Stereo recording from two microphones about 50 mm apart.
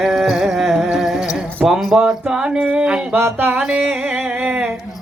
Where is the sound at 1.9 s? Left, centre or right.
Centre.